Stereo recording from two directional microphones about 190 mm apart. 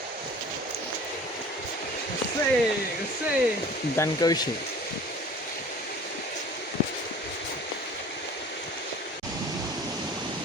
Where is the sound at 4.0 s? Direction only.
20° left (ahead or behind).